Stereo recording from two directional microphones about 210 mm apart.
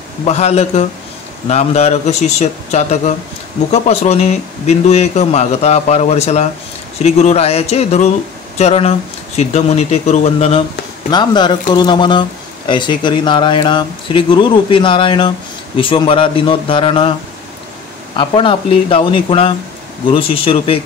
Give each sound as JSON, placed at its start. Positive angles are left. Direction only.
{"t": 0.2, "sound": "speech", "side_deg": 30}
{"t": 11.1, "sound": "speech", "side_deg": 20}
{"t": 18.1, "sound": "speech", "side_deg": 25}